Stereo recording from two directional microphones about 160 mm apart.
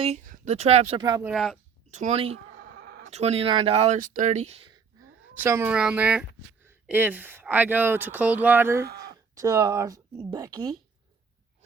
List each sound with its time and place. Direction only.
0.3 s speech: 45° right (ahead or behind)
0.9 s speech: 25° right (ahead or behind)
1.2 s speech: centre (ahead or behind)
1.9 s speech: 45° right (ahead or behind)
2.6 s a sound: 85° right
3.1 s speech: 40° right (ahead or behind)
5.4 s speech: 15° right (ahead or behind)